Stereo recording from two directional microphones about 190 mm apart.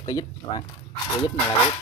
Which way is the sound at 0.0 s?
20° left (ahead or behind).